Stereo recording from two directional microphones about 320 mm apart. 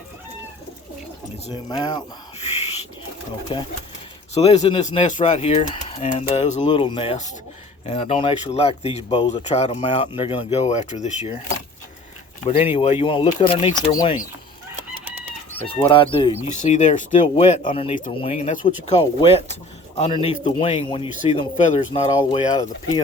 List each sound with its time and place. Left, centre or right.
1.7 s a sound: centre
3.5 s speech: centre
12.7 s speech: centre
15.6 s speech: centre